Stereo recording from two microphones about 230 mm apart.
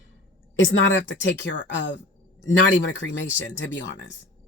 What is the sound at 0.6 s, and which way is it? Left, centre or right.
A woman's voice, left.